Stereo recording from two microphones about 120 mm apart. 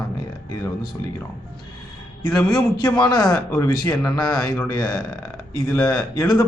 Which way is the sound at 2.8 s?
30° left (ahead or behind).